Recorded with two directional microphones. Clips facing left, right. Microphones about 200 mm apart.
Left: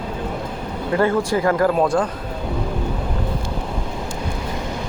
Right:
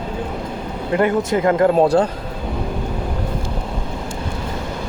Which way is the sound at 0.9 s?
20° right (ahead or behind).